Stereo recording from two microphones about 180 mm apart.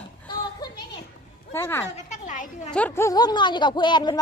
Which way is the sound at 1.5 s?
15° left (ahead or behind).